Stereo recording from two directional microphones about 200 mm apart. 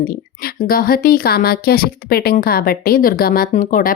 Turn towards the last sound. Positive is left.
turn(degrees=45)  # may be behind; listen again after turning